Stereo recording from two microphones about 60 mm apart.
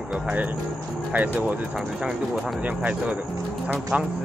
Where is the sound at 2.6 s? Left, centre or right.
Right.